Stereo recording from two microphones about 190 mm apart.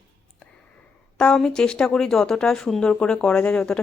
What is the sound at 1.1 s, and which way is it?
Speech, 5° left (ahead or behind).